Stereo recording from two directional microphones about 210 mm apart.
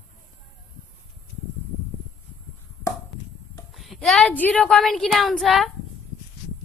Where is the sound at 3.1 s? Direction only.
Centre (ahead or behind).